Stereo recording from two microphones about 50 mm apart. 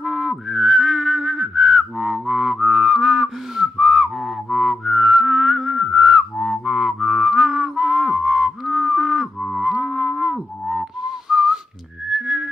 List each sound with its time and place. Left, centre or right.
0.0 s whistling: centre
2.2 s music: centre
2.5 s whistling: centre
6.6 s music: centre
11.0 s whistling: centre